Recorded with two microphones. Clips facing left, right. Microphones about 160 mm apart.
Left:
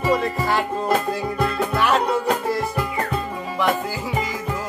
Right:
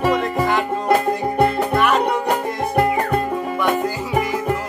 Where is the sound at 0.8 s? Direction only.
65° right (ahead or behind).